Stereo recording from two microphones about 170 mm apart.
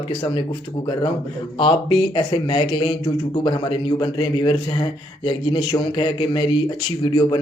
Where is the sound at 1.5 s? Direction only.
30° left (ahead or behind).